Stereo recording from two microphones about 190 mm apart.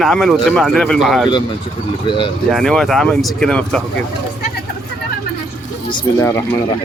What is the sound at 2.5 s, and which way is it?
Speech, centre (ahead or behind).